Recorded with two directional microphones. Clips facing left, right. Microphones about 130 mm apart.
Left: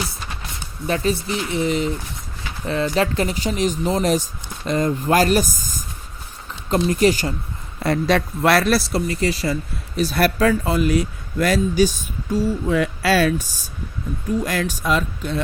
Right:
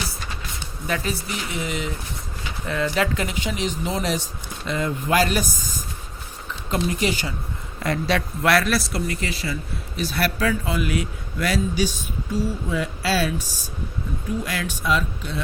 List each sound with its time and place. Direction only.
0.9 s speech: 30° left (ahead or behind)
12.7 s speech: 65° left (ahead or behind)
14.4 s speech: 40° left (ahead or behind)